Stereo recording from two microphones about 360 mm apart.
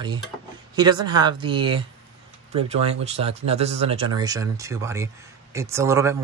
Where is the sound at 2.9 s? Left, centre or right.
Centre.